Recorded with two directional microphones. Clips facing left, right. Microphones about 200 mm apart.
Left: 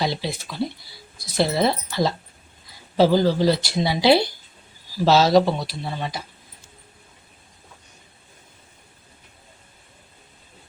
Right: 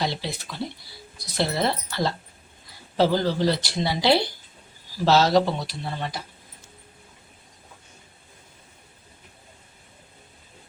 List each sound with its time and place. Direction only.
0.0 s speech: 10° left (ahead or behind)
1.4 s speech: 10° left (ahead or behind)